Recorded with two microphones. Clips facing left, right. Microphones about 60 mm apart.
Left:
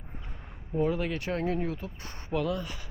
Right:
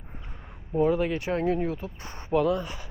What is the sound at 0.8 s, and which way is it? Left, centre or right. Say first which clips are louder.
Speech: right 5 dB; centre.